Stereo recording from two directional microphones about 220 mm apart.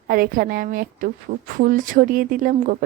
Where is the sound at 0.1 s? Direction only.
40° right (ahead or behind).